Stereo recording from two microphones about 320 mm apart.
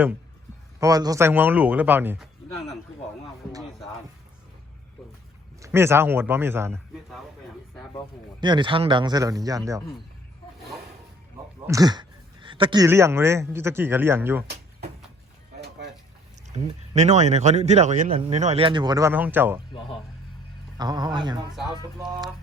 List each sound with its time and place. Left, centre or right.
0.8 s a man's voice: centre
5.6 s a man's voice: centre
8.4 s a man's voice: centre
11.6 s speech: centre
16.5 s speech: right
20.7 s a man's voice: centre